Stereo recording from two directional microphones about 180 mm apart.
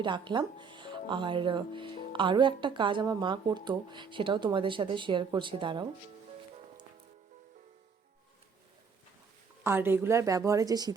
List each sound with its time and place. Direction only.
0.0 s speech: 25° right (ahead or behind)
9.6 s a woman's voice: 10° right (ahead or behind)